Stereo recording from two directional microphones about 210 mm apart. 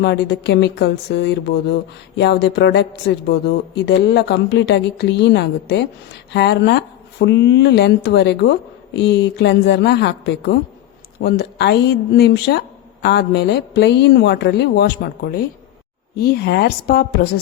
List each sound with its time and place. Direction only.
0.0 s speech: 55° left (ahead or behind)